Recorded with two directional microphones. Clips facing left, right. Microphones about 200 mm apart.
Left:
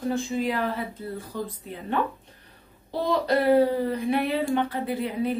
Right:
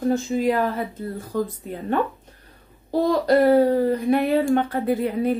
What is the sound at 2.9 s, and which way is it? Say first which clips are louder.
Speech: right 6 dB; 45° right (ahead or behind).